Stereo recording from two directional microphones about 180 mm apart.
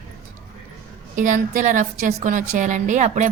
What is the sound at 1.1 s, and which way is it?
Speech, 45° right (ahead or behind).